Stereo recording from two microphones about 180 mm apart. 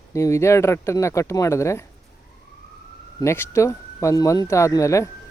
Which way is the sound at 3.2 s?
15° left (ahead or behind).